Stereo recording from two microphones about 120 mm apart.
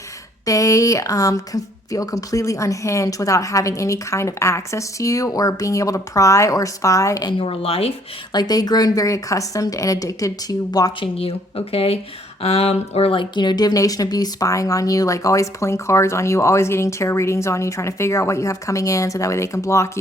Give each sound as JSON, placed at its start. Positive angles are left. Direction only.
{"t": 0.4, "sound": "speech", "side_deg": 30}
{"t": 7.3, "sound": "speech", "side_deg": 50}
{"t": 8.3, "sound": "speech", "side_deg": 35}
{"t": 11.0, "sound": "speech", "side_deg": 55}